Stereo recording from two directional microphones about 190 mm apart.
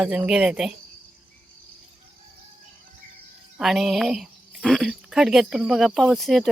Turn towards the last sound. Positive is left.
turn(degrees=0)  # may be behind; listen again after turning